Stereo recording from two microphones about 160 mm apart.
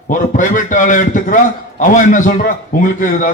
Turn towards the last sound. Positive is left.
turn(degrees=55)  # may be behind; listen again after turning